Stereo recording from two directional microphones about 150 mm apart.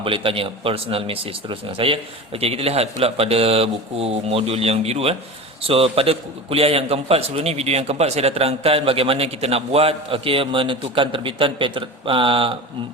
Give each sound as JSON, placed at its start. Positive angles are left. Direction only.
{"t": 0.0, "sound": "a man's voice", "side_deg": -35}